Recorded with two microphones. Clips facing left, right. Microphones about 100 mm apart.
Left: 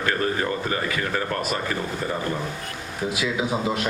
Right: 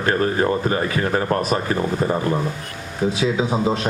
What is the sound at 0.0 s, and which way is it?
Speech, 35° right (ahead or behind).